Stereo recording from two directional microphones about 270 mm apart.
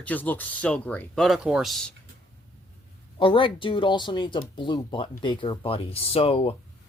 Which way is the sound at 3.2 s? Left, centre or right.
Centre.